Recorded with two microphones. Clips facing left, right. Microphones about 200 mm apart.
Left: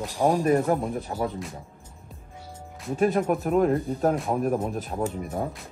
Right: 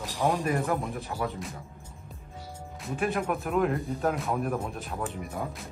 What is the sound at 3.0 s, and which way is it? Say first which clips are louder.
Speech: left 6 dB; 35° left (ahead or behind).